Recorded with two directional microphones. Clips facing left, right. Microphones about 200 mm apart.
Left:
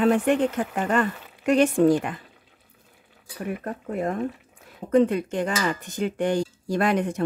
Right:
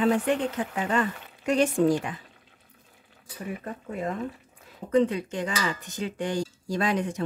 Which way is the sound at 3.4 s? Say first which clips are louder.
Left 4 dB; 60° left (ahead or behind).